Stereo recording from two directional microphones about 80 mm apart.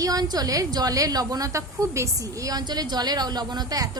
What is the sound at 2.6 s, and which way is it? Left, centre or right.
Speech, right.